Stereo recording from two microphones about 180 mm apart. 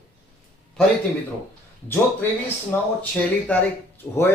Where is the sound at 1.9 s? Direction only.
10° left (ahead or behind).